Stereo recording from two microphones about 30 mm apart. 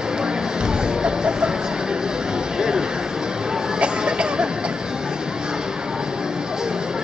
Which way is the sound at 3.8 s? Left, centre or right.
Right.